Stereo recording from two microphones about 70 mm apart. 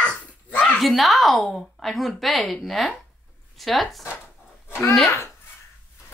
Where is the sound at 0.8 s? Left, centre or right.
Centre.